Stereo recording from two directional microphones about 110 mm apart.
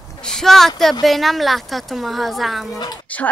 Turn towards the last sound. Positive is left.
turn(degrees=40)  # may be behind; listen again after turning